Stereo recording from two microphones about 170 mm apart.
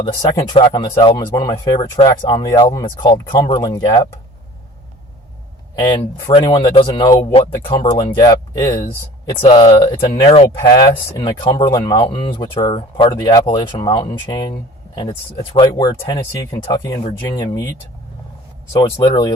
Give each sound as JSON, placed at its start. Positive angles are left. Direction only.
{"t": 0.0, "sound": "speech", "side_deg": 25}
{"t": 6.2, "sound": "speech", "side_deg": 30}
{"t": 8.2, "sound": "speech", "side_deg": 20}
{"t": 9.6, "sound": "speech", "side_deg": 30}
{"t": 15.5, "sound": "speech", "side_deg": 20}
{"t": 18.7, "sound": "speech", "side_deg": 25}